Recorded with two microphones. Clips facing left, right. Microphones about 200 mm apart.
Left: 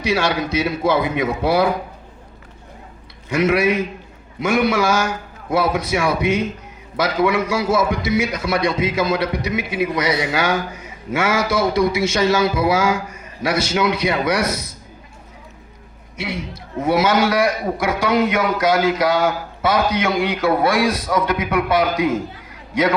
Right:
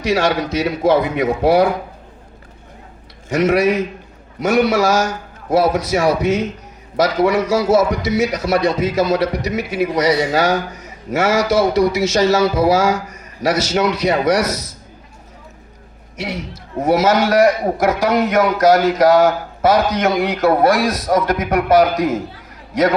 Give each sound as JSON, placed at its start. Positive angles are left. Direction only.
{"t": 0.0, "sound": "a man's voice", "side_deg": -40}
{"t": 3.2, "sound": "a man's voice", "side_deg": -40}
{"t": 16.1, "sound": "a man's voice", "side_deg": -40}